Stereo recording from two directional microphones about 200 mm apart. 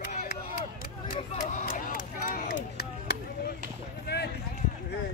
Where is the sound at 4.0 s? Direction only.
55° left (ahead or behind).